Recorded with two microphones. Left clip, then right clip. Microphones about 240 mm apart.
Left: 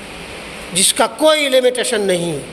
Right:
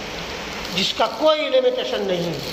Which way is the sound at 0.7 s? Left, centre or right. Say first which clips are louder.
Left 5 dB; left.